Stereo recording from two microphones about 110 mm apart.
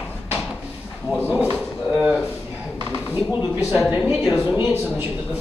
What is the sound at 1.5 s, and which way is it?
Drawer open or close, 15° right (ahead or behind).